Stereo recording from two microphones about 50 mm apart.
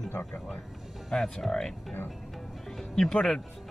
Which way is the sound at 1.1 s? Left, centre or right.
Centre.